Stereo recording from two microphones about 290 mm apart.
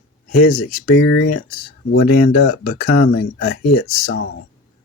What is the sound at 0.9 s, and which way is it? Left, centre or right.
Speech, left.